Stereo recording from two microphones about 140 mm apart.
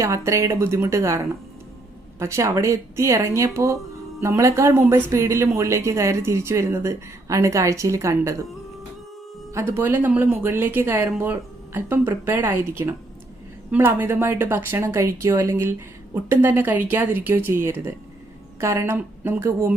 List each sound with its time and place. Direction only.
0.0 s speech: 20° right (ahead or behind)
9.6 s speech: 20° right (ahead or behind)